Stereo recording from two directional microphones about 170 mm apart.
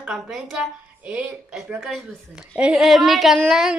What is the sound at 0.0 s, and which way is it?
A woman's voice, centre (ahead or behind).